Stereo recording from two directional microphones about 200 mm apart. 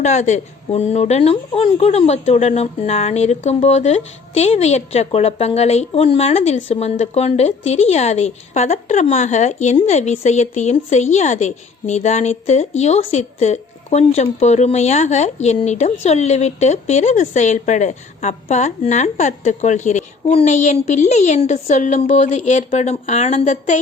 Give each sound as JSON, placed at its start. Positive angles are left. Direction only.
{"t": 0.0, "sound": "speech", "side_deg": 35}